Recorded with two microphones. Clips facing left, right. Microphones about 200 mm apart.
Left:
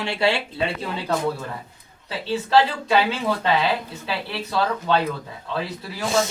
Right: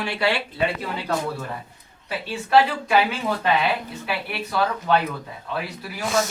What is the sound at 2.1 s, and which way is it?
Speech, 25° left (ahead or behind).